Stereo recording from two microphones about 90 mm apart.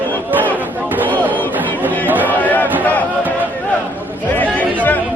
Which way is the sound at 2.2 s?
20° left (ahead or behind).